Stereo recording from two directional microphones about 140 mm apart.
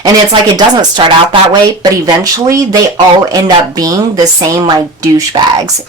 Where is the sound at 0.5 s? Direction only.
30° right (ahead or behind).